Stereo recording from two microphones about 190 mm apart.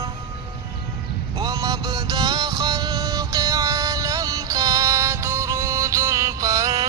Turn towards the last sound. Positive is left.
turn(degrees=-15)  # may be behind; listen again after turning